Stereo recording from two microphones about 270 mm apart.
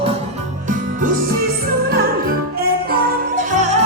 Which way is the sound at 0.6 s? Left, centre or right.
Right.